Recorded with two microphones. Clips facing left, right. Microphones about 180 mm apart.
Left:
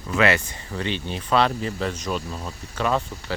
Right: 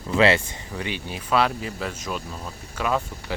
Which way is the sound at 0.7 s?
10° right (ahead or behind).